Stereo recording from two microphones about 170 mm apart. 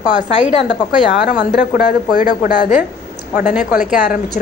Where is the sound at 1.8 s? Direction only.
60° left (ahead or behind).